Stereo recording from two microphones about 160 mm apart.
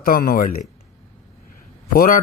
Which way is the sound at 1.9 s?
60° left (ahead or behind).